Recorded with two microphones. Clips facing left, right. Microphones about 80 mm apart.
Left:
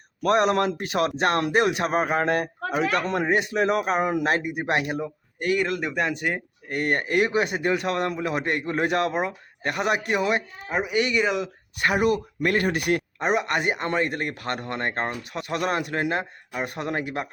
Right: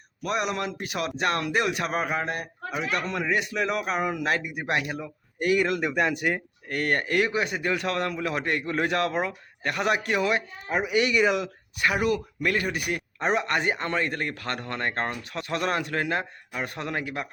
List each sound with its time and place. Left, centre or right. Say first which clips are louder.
0.2 s speech: left 7 dB; left
2.1 s speech: left 7 dB; left
3.1 s speech: left 4 dB; left
5.4 s speech: right 1 dB; centre
6.3 s speech: left 1 dB; centre
10.7 s speech: even; centre
11.8 s speech: left 3 dB; left
12.5 s speech: left 4 dB; left
13.1 s speech: left 1 dB; centre
13.8 s speech: left 2 dB; left